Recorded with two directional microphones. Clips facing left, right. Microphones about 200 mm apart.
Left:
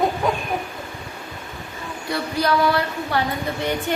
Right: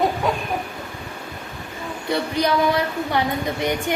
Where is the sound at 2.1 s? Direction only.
20° right (ahead or behind).